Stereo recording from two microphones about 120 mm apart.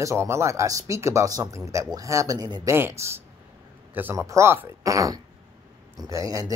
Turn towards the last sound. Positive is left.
turn(degrees=-25)  # may be behind; listen again after turning